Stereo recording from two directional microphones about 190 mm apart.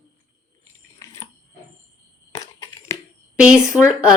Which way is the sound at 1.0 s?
15° left (ahead or behind).